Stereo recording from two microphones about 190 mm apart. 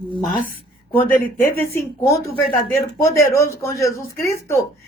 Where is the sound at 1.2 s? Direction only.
10° left (ahead or behind).